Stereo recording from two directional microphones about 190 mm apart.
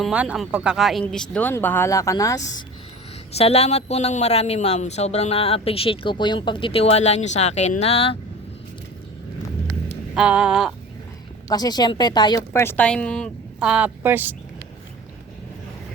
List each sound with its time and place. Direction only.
0.0 s a woman's voice: 5° right (ahead or behind); by 2.6 s 15° left (ahead or behind)
3.3 s a woman's voice: 35° left (ahead or behind)
10.2 s a sound: 5° right (ahead or behind)
11.4 s a woman's voice: 20° left (ahead or behind); by 14.3 s 10° right (ahead or behind)